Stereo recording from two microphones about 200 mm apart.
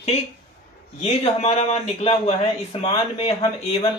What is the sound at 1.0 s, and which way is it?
A man's voice, 30° left (ahead or behind).